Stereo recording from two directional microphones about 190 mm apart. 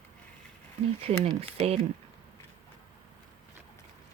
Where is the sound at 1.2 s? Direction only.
35° right (ahead or behind).